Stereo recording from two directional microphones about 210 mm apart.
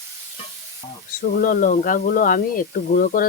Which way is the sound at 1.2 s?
40° left (ahead or behind).